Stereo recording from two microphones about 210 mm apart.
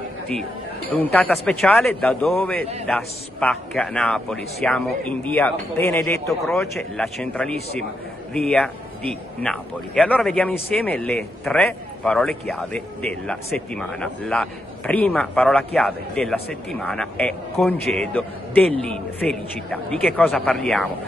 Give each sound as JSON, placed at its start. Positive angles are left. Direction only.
{"t": 0.3, "sound": "a man's voice", "side_deg": 5}